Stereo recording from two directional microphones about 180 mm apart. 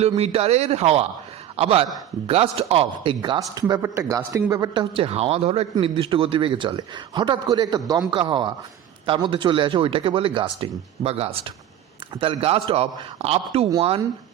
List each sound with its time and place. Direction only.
0.2 s a man's voice: 35° right (ahead or behind)